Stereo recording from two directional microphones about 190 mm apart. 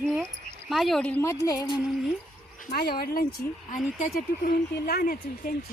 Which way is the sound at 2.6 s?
55° left (ahead or behind).